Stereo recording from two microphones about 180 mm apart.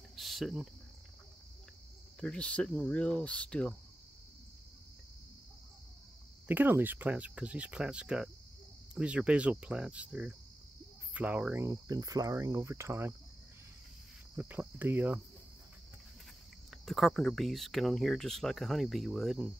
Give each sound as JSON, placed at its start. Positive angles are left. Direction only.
{"t": 0.1, "sound": "cricket", "side_deg": 0}
{"t": 2.1, "sound": "speech", "side_deg": 5}
{"t": 6.4, "sound": "cricket", "side_deg": -10}
{"t": 14.3, "sound": "cricket", "side_deg": -10}
{"t": 16.7, "sound": "speech", "side_deg": 0}